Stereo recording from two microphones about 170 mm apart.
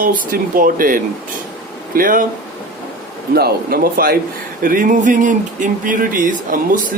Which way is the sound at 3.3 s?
65° right (ahead or behind).